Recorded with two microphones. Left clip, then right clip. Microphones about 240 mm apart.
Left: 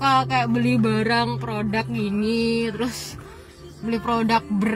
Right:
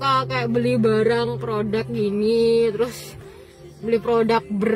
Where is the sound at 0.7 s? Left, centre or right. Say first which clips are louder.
Right 4 dB; centre.